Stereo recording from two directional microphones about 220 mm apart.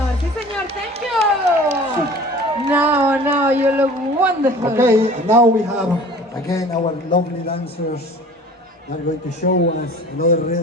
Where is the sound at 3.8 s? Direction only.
10° right (ahead or behind).